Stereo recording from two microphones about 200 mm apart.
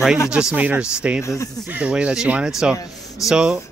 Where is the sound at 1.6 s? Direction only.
5° right (ahead or behind).